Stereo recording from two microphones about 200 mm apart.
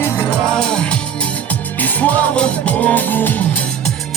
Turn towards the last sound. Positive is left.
turn(degrees=5)  # may be behind; listen again after turning